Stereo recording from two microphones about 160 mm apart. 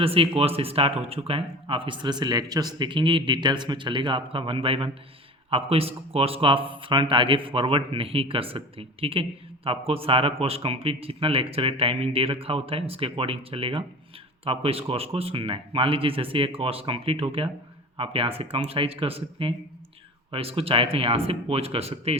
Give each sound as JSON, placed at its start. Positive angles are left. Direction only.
{"t": 0.0, "sound": "speech", "side_deg": -35}